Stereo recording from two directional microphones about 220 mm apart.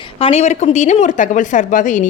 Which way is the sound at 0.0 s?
25° left (ahead or behind).